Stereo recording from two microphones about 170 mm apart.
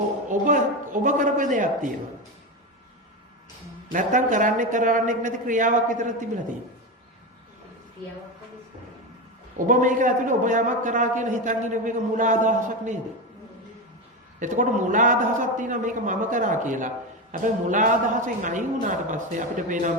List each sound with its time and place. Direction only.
0.3 s a man's voice: 50° right (ahead or behind)
3.9 s a man's voice: 50° right (ahead or behind)
9.6 s a man's voice: 50° right (ahead or behind)
14.3 s a man's voice: 50° right (ahead or behind)